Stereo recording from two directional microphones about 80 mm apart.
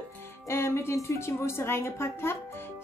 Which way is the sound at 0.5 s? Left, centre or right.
Left.